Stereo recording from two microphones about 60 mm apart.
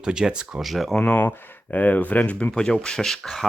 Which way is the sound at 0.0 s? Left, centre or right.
Centre.